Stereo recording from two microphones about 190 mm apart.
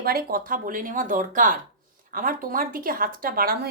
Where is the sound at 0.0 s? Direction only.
50° right (ahead or behind).